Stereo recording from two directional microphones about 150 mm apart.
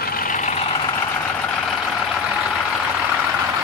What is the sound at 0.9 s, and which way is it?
Vehicle, 15° left (ahead or behind).